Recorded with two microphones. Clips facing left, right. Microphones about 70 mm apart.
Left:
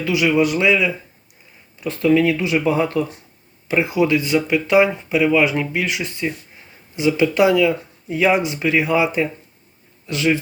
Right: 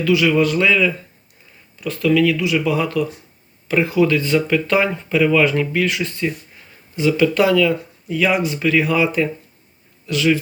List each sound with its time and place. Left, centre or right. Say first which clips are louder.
0.0 s a man's voice: right 1 dB; centre
1.8 s speech: even; left